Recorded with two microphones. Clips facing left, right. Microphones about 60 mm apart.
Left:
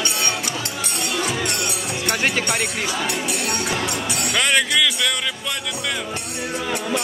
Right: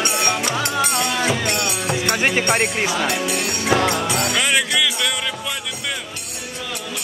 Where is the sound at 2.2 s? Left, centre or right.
Right.